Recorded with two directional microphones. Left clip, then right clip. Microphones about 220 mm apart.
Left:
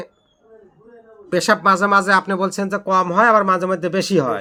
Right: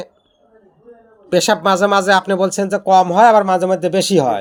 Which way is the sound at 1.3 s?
15° right (ahead or behind).